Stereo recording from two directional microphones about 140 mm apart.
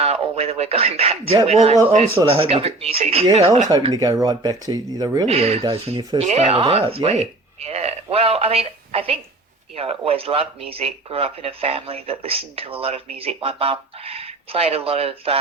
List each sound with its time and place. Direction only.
0.0 s speech: 45° right (ahead or behind)
3.9 s speech: 25° right (ahead or behind)
5.3 s speech: 45° right (ahead or behind)